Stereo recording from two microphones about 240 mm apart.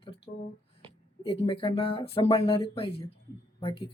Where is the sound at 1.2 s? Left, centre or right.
Left.